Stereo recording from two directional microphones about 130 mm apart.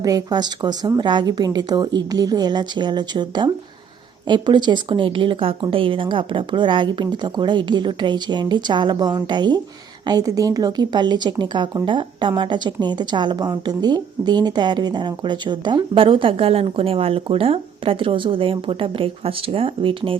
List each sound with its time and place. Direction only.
0.0 s speech: 30° right (ahead or behind)